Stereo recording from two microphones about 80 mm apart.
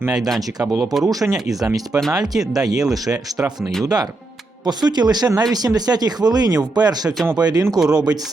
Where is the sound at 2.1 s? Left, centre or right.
Right.